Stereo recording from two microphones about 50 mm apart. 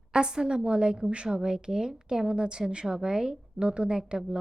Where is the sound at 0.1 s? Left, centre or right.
Centre.